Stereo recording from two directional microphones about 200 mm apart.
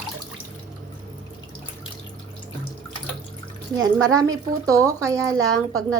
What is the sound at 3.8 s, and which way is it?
Speech, 20° right (ahead or behind).